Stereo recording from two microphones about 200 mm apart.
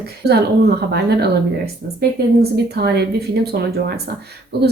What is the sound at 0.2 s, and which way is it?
Speech, 55° right (ahead or behind).